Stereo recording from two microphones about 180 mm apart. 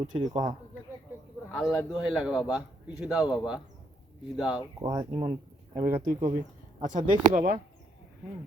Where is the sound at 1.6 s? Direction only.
20° left (ahead or behind).